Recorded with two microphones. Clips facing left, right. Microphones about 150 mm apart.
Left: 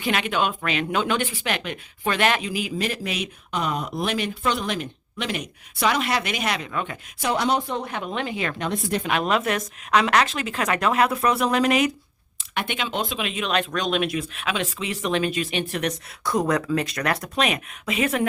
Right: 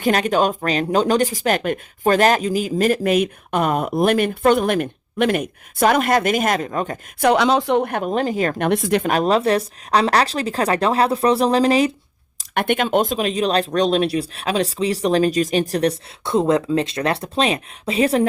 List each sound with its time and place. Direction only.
0.0 s speech: 40° right (ahead or behind)
7.2 s speech: 75° right (ahead or behind); by 8.5 s 40° right (ahead or behind)
8.5 s speech: 70° right (ahead or behind)
9.0 s speech: 35° right (ahead or behind)
12.4 s speech: 50° right (ahead or behind); by 18.3 s 35° right (ahead or behind)